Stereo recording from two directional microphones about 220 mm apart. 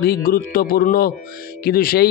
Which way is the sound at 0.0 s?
45° left (ahead or behind).